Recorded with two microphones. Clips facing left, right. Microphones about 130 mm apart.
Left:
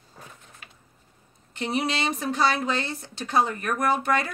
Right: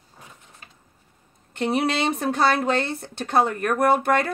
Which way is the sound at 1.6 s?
55° right (ahead or behind).